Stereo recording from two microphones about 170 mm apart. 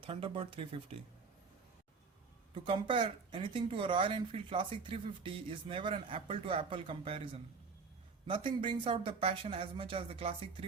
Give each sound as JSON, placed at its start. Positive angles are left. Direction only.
{"t": 0.0, "sound": "speech", "side_deg": -30}
{"t": 2.6, "sound": "speech", "side_deg": -30}